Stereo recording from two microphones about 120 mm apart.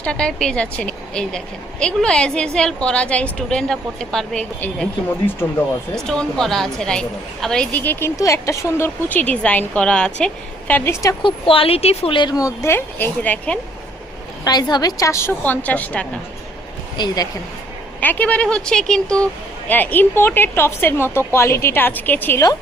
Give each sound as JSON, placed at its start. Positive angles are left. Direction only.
{"t": 0.0, "sound": "speech", "side_deg": 10}
{"t": 5.9, "sound": "a woman's voice", "side_deg": 5}
{"t": 9.0, "sound": "speech", "side_deg": 15}
{"t": 11.2, "sound": "speech", "side_deg": 45}
{"t": 14.4, "sound": "a woman's voice", "side_deg": 35}
{"t": 18.0, "sound": "speech", "side_deg": 15}